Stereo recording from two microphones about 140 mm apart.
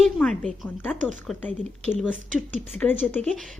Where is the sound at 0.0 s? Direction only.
5° left (ahead or behind).